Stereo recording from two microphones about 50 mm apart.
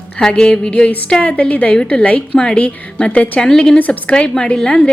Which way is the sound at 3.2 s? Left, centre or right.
Left.